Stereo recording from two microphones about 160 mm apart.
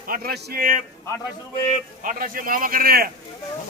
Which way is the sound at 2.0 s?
60° right (ahead or behind).